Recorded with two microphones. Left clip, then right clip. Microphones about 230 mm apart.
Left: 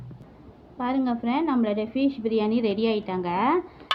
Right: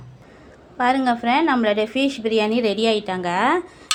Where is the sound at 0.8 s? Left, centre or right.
Centre.